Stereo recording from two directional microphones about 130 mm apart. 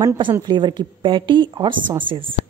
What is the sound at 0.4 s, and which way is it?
A woman's voice, 35° right (ahead or behind).